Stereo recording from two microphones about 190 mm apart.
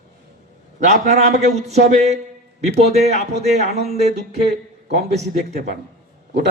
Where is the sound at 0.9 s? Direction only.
40° right (ahead or behind).